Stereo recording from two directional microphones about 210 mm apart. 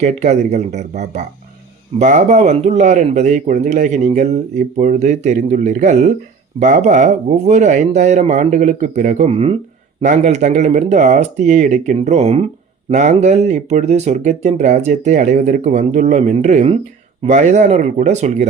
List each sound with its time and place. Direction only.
0.0 s speech: 35° right (ahead or behind)